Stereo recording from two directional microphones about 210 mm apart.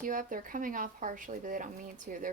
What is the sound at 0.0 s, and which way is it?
Speech, 40° right (ahead or behind).